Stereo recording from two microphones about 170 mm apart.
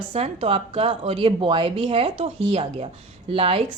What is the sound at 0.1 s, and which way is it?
A woman's voice, 35° right (ahead or behind).